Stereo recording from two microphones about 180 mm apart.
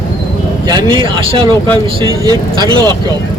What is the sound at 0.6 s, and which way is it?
Speech, 25° right (ahead or behind).